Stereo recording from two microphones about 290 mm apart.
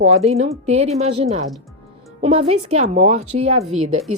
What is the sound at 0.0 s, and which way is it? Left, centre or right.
A woman's voice, right.